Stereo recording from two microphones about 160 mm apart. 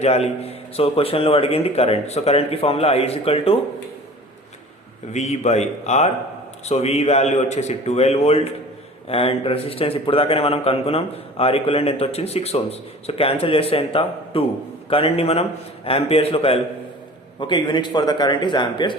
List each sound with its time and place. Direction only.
0.0 s a man's voice: 40° left (ahead or behind)
5.1 s a man's voice: 45° left (ahead or behind); by 18.9 s 30° left (ahead or behind)